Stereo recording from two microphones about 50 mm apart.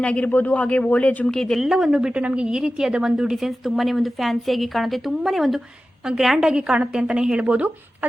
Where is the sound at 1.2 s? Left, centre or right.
Centre.